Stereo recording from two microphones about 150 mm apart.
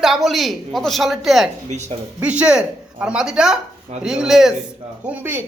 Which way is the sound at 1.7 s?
50° right (ahead or behind).